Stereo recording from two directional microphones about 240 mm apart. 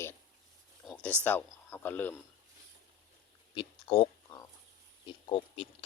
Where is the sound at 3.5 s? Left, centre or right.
Left.